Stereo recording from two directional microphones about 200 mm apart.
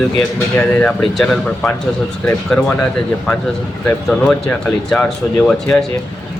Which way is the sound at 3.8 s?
5° left (ahead or behind).